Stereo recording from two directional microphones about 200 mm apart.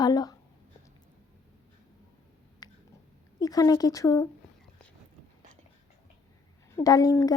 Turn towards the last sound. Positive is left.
turn(degrees=15)  # may be behind; listen again after turning